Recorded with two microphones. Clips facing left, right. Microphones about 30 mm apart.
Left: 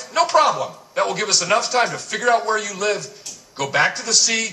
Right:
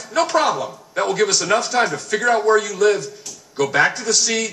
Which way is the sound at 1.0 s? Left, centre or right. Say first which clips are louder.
Right 2 dB; left.